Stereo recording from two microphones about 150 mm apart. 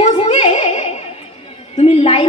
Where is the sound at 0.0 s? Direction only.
40° left (ahead or behind).